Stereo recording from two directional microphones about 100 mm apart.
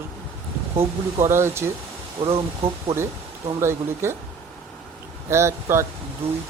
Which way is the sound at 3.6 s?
25° right (ahead or behind).